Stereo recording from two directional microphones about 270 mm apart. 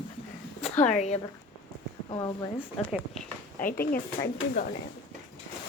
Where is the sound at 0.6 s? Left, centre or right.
Left.